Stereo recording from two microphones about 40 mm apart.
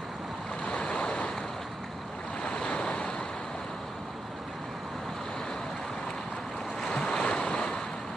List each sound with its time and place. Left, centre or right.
0.7 s waves: left
2.4 s waves: left
6.8 s waves: centre